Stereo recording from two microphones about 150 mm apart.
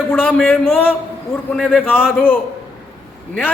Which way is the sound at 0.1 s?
10° left (ahead or behind).